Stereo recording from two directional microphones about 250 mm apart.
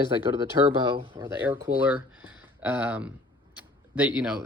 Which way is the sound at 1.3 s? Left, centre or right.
Centre.